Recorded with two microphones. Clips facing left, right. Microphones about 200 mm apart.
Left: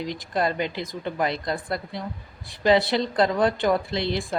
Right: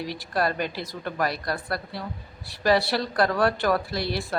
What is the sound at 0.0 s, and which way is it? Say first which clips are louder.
Speech: left 1 dB; 20° left (ahead or behind).